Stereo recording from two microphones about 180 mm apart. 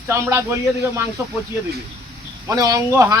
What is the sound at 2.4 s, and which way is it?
Speech, 20° right (ahead or behind).